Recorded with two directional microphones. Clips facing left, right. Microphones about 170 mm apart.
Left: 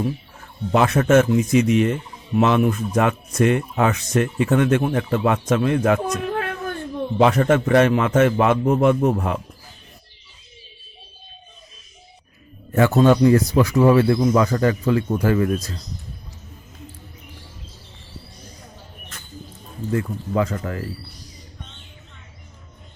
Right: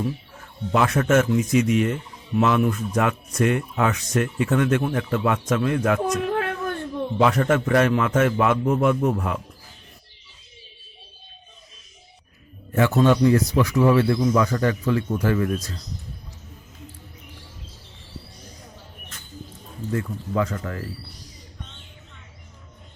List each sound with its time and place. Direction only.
0.7 s speech: 25° left (ahead or behind)
6.1 s a sound: centre (ahead or behind)
7.2 s speech: 25° left (ahead or behind)
12.7 s speech: 40° left (ahead or behind)
20.3 s speech: 20° left (ahead or behind)